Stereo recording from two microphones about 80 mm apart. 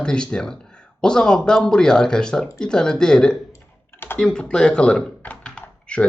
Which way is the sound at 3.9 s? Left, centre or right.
Left.